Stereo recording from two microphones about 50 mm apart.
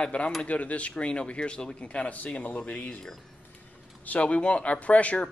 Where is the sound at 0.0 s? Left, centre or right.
Left.